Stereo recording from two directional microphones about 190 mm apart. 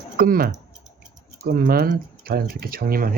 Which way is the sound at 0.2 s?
50° right (ahead or behind).